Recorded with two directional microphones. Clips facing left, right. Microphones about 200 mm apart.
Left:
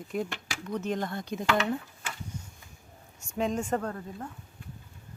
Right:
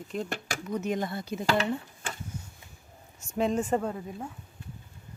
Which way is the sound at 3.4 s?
5° right (ahead or behind).